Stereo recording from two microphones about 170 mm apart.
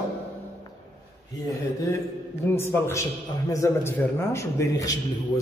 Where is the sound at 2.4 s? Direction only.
15° left (ahead or behind).